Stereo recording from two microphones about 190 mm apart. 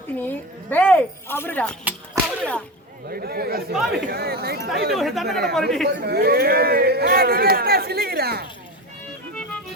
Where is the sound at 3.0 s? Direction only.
55° right (ahead or behind).